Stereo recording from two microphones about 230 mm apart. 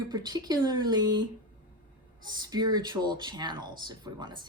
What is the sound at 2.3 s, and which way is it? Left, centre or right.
Speech, centre.